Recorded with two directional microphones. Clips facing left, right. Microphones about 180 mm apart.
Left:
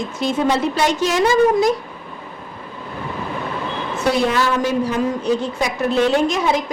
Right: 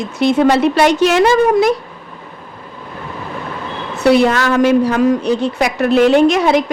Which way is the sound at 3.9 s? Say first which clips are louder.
Right 7 dB; 70° right (ahead or behind).